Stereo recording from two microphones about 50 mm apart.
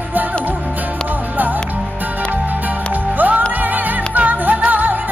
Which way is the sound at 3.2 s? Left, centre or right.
Right.